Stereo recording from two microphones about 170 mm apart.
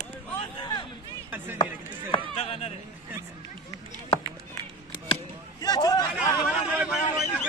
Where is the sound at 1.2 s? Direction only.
10° right (ahead or behind).